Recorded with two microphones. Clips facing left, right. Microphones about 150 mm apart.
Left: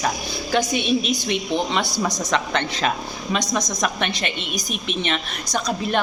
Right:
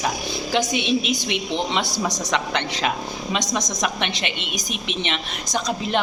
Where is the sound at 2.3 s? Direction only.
15° right (ahead or behind).